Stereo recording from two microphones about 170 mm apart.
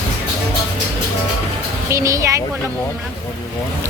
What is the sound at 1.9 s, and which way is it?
Speech, 20° right (ahead or behind).